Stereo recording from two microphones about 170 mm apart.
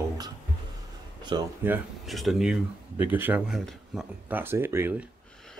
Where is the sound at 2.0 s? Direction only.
Centre (ahead or behind).